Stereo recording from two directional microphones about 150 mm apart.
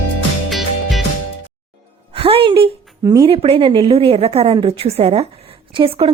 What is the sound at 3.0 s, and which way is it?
Speech, 20° right (ahead or behind).